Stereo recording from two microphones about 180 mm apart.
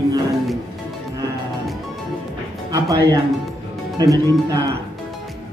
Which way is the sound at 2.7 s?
20° right (ahead or behind).